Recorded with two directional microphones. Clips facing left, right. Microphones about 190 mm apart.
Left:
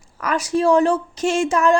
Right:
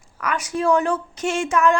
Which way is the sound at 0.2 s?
35° left (ahead or behind).